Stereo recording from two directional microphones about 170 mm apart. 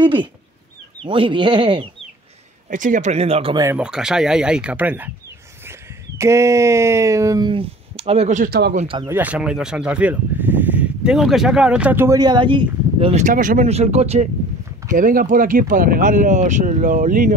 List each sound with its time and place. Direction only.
0.0 s speech: 30° right (ahead or behind)
2.7 s speech: 50° right (ahead or behind)
3.7 s speech: 5° right (ahead or behind); by 8.5 s 40° right (ahead or behind)
8.5 s speech: 75° right (ahead or behind)
9.0 s speech: 10° right (ahead or behind); by 12.6 s 25° right (ahead or behind)
13.0 s speech: 45° right (ahead or behind)
14.9 s speech: 50° right (ahead or behind)